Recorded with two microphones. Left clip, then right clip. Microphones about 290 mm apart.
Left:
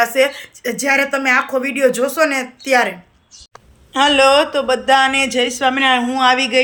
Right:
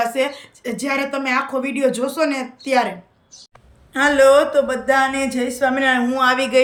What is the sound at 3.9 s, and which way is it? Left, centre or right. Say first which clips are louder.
Speech: left 1 dB; centre.